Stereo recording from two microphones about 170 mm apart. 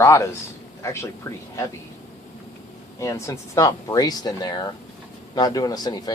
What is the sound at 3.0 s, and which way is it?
Speech, 20° left (ahead or behind).